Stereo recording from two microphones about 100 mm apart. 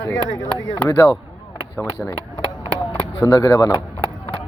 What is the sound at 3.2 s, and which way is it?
Speech, 35° left (ahead or behind).